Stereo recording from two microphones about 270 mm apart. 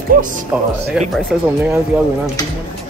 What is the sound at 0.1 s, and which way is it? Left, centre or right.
Speech, right.